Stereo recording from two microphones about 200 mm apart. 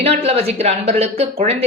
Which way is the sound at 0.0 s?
30° right (ahead or behind).